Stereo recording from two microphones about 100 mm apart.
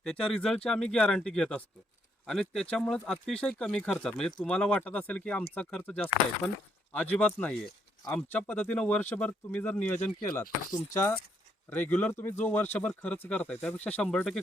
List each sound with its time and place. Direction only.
0.0 s speech: 5° left (ahead or behind)
6.9 s speech: 15° left (ahead or behind)
10.4 s chopping: 35° left (ahead or behind)
11.7 s speech: 15° left (ahead or behind)